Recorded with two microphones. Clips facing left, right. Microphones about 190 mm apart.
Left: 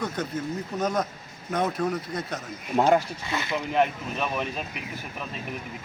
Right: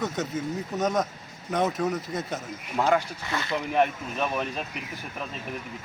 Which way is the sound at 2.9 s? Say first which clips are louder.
Left 2 dB; 15° left (ahead or behind).